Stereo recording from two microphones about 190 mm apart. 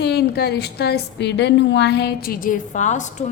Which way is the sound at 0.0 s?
60° left (ahead or behind).